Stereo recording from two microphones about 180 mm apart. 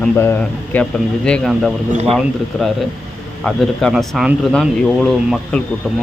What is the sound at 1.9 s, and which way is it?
Speech, 40° right (ahead or behind).